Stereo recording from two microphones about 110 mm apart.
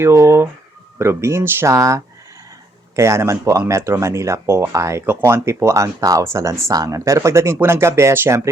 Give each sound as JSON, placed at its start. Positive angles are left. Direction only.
{"t": 0.0, "sound": "speech", "side_deg": -25}